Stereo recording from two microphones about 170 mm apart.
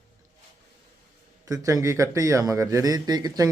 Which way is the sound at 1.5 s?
20° right (ahead or behind).